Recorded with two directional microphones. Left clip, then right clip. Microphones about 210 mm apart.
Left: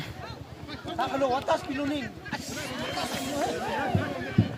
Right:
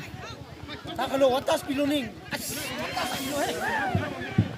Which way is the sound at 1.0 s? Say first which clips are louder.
Right 4 dB; 55° right (ahead or behind).